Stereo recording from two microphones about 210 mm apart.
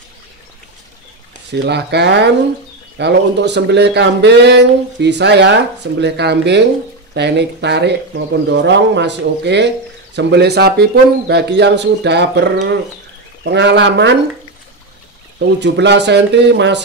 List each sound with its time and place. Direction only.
1.5 s speech: 55° right (ahead or behind)
15.3 s speech: 55° right (ahead or behind)